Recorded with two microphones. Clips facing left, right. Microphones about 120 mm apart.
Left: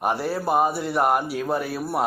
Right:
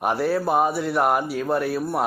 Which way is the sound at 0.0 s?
Centre (ahead or behind).